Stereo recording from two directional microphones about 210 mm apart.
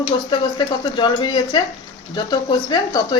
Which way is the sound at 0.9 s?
20° left (ahead or behind).